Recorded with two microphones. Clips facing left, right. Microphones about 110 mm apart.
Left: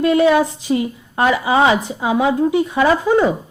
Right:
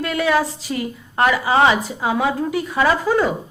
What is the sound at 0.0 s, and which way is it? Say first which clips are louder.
A woman's voice: left 6 dB; 25° left (ahead or behind).